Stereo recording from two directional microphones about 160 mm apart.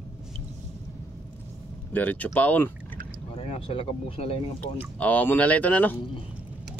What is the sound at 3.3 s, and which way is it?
Speech, 35° left (ahead or behind).